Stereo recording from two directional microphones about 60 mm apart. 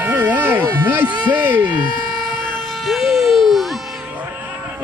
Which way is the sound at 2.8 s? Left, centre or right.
Centre.